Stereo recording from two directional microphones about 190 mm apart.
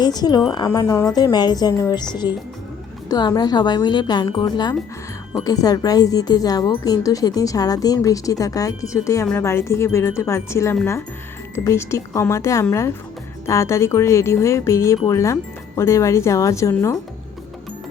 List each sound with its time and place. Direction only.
0.0 s a woman's voice: 20° left (ahead or behind)